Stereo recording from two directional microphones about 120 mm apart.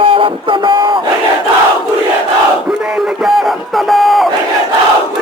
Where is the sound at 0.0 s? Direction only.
45° right (ahead or behind).